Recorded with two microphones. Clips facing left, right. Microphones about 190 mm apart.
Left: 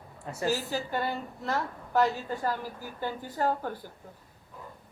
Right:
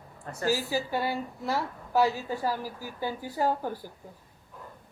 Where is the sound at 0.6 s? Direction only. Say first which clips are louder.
Right 2 dB; 10° right (ahead or behind).